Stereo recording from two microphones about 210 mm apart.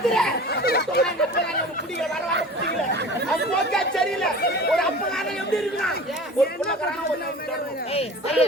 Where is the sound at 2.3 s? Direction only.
55° right (ahead or behind).